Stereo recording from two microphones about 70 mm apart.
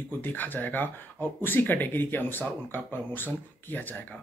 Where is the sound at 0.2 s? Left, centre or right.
Left.